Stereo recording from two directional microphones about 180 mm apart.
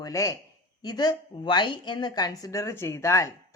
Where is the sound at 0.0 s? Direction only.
15° left (ahead or behind).